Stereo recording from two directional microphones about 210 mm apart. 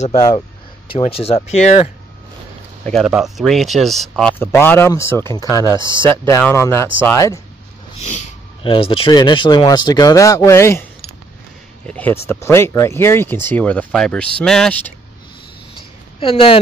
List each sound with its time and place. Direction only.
0.0 s speech: 25° left (ahead or behind)
2.8 s speech: centre (ahead or behind)
8.0 s speech: 35° left (ahead or behind); by 10.9 s 10° left (ahead or behind)
11.9 s speech: 10° left (ahead or behind)
16.2 s speech: 25° left (ahead or behind)